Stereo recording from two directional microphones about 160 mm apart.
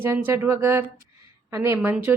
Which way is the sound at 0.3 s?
15° right (ahead or behind).